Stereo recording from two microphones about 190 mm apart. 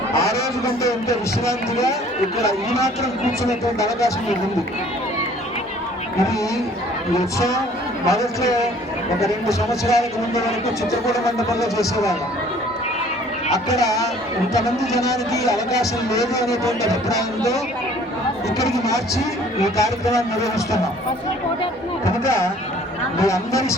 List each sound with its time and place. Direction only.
0.1 s a sound: 15° left (ahead or behind)
2.8 s speech: 15° left (ahead or behind)
6.1 s speech: 15° left (ahead or behind)
11.1 s speech: 15° left (ahead or behind)
13.7 s speech: 20° left (ahead or behind)
18.9 s speech: 15° left (ahead or behind)
22.0 s speech: 15° left (ahead or behind)